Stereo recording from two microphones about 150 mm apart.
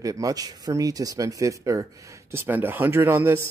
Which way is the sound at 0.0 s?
25° right (ahead or behind).